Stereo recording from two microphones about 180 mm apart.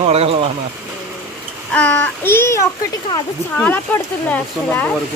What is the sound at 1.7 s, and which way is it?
Speech, 5° left (ahead or behind).